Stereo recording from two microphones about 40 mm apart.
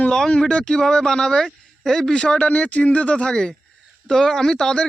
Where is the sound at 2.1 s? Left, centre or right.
Left.